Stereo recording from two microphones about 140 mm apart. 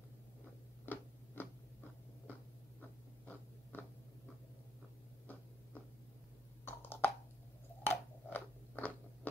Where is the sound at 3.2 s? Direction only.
10° left (ahead or behind).